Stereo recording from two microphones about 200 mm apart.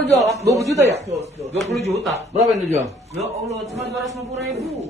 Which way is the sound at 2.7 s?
35° right (ahead or behind).